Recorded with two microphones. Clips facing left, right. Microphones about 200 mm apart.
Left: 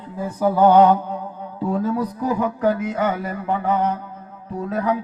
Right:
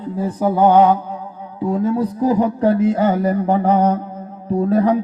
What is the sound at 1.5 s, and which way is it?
A man's voice, 20° right (ahead or behind).